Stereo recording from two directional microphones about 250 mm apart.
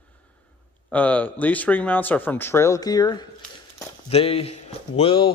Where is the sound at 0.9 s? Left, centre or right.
Centre.